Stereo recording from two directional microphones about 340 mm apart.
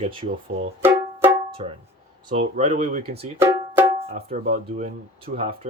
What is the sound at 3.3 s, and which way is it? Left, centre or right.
Music, centre.